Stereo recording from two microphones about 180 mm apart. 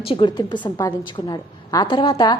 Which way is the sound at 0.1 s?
25° left (ahead or behind).